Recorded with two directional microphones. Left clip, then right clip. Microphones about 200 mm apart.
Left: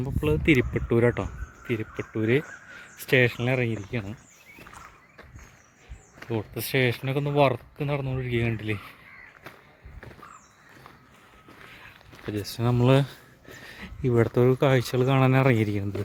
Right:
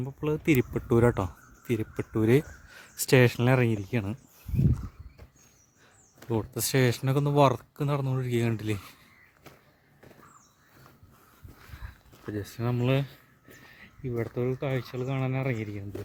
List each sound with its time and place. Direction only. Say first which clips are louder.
0.0 s speech: left 4 dB; 5° right (ahead or behind)
0.9 s speech: even; 20° right (ahead or behind); by 4.1 s 40° right (ahead or behind)
6.2 s speech: even; 25° right (ahead or behind)
12.3 s speech: left 4 dB; centre (ahead or behind)
12.6 s speech: left 7 dB; 20° left (ahead or behind); by 15.8 s 45° left (ahead or behind)